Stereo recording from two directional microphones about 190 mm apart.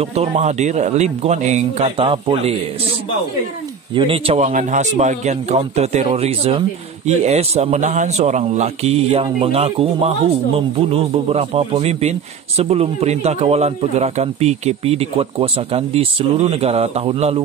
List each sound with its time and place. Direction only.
0.0 s a man's voice: 30° right (ahead or behind)
3.9 s a man's voice: 25° right (ahead or behind)